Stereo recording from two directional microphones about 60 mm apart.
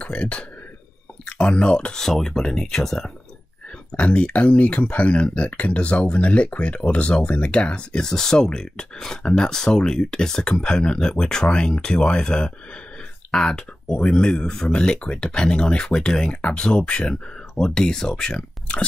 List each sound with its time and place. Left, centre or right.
0.0 s speech: centre
3.9 s speech: left